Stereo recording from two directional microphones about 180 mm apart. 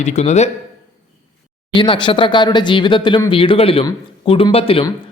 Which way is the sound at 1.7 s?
25° left (ahead or behind).